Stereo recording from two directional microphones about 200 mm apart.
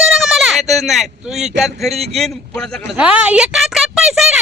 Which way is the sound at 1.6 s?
Centre (ahead or behind).